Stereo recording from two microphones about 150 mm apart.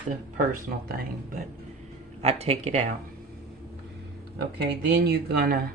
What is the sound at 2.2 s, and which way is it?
Speech, 45° right (ahead or behind).